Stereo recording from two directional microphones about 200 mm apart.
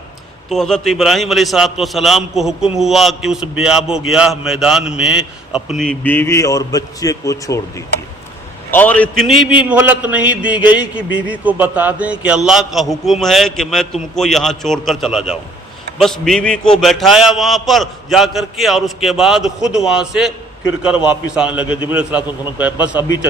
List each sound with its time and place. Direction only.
0.5 s a man's voice: centre (ahead or behind)
8.7 s a man's voice: 10° left (ahead or behind); by 23.1 s 10° right (ahead or behind)